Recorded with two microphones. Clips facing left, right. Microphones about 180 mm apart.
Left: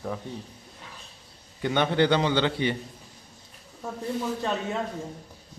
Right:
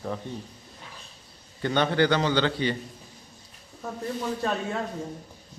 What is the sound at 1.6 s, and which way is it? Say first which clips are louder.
Speech: even; 15° left (ahead or behind).